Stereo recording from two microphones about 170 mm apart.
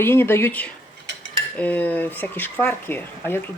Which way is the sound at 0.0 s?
15° left (ahead or behind).